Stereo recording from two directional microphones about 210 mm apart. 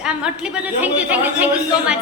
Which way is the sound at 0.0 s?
5° right (ahead or behind).